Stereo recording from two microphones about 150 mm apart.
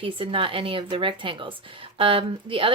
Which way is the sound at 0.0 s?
35° right (ahead or behind).